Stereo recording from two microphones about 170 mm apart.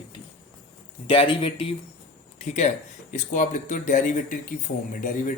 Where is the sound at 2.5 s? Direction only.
45° left (ahead or behind).